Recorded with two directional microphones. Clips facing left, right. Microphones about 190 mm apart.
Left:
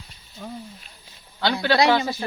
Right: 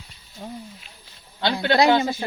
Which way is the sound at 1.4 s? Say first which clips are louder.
Right 1 dB; 20° right (ahead or behind).